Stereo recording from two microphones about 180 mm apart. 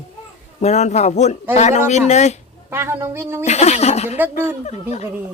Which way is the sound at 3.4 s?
40° left (ahead or behind).